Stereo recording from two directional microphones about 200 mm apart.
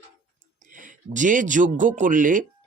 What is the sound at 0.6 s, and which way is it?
Speech, 40° right (ahead or behind).